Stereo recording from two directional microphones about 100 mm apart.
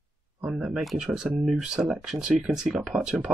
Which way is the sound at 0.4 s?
15° right (ahead or behind).